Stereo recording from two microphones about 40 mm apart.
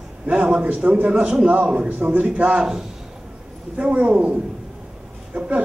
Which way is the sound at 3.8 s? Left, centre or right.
Right.